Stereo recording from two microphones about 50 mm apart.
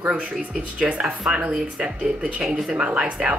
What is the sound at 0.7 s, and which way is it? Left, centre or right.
Speech, right.